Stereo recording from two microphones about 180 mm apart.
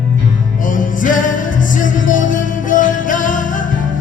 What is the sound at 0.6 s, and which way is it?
Music, 45° left (ahead or behind).